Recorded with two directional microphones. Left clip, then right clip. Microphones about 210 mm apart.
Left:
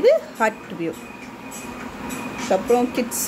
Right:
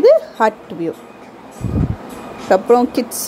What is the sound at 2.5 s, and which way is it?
Speech, 25° right (ahead or behind).